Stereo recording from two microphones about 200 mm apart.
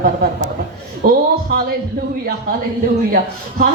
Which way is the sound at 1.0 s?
50° right (ahead or behind).